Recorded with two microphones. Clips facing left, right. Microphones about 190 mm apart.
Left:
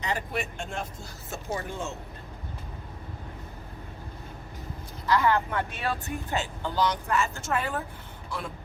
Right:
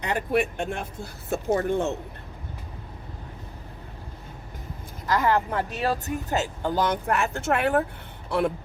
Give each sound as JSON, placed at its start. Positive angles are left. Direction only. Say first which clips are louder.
{"t": 0.0, "sound": "speech", "louder": "right 7 dB", "side_deg": -60}
{"t": 5.0, "sound": "speech", "louder": "right 1 dB", "side_deg": -45}